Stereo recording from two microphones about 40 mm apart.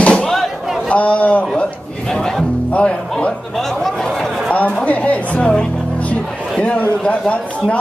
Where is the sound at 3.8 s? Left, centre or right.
Centre.